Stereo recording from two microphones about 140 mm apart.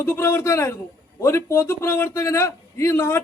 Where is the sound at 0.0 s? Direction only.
20° left (ahead or behind).